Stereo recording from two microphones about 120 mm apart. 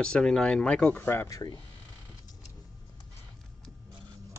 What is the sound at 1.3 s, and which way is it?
Speech, 30° left (ahead or behind).